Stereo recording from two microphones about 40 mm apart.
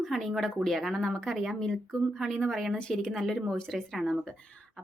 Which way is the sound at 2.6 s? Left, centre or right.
Left.